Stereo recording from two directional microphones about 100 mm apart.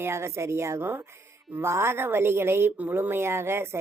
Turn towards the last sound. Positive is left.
turn(degrees=-25)  # may be behind; listen again after turning